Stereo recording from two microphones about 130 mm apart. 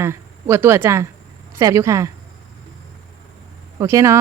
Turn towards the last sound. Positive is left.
turn(degrees=-20)  # may be behind; listen again after turning